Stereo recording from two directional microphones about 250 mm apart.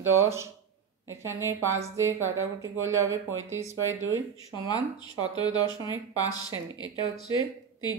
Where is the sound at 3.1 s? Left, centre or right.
Right.